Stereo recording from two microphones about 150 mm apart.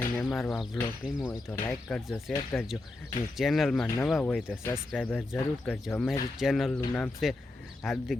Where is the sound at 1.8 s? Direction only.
Centre (ahead or behind).